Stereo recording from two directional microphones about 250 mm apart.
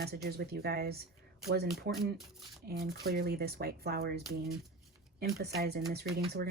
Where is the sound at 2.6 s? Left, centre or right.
Right.